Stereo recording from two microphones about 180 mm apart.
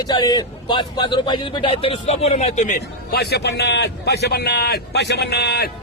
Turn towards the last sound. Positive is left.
turn(degrees=65)  # may be behind; listen again after turning